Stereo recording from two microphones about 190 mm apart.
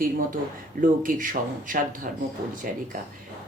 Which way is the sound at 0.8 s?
45° right (ahead or behind).